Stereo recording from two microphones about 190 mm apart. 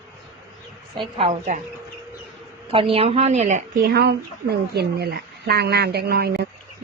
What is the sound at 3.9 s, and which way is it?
Speech, 60° right (ahead or behind).